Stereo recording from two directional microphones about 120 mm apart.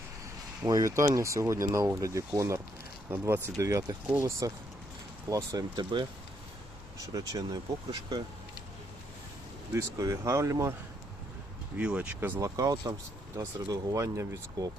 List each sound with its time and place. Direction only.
0.6 s speech: 30° right (ahead or behind)
7.1 s speech: 30° right (ahead or behind)
9.7 s speech: 25° right (ahead or behind)
11.8 s speech: 10° right (ahead or behind)
12.4 s speech: 30° right (ahead or behind)